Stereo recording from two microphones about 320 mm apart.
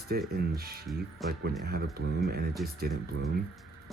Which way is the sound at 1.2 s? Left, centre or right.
Centre.